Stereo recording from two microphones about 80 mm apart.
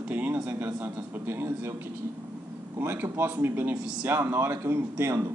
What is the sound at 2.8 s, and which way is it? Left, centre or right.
Speech, right.